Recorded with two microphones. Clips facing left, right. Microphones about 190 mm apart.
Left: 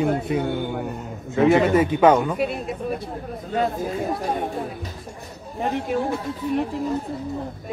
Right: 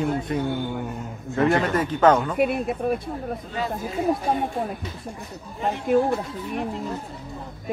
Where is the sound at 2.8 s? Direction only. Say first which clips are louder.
Right 3 dB; 55° right (ahead or behind).